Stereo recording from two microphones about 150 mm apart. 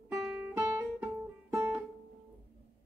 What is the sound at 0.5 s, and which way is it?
Guitar, 15° right (ahead or behind).